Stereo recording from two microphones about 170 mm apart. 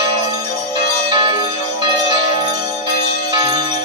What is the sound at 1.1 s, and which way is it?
Bell, 30° right (ahead or behind).